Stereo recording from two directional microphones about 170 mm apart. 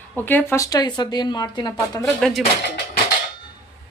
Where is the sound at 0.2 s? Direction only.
10° left (ahead or behind).